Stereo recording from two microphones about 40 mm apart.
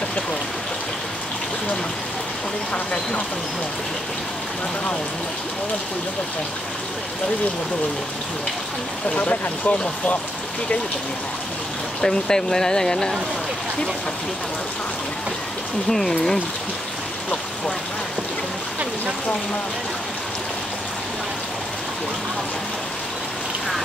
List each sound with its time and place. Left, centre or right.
2.7 s speech: left
9.1 s speech: left
12.0 s speech: centre
15.9 s speech: centre